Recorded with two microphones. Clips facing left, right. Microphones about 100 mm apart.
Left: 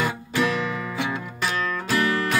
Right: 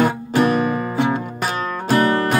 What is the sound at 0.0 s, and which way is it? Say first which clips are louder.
Music: right 7 dB; 50° right (ahead or behind).